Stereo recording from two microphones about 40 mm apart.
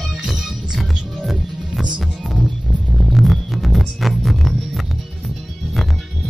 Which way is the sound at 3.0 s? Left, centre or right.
Centre.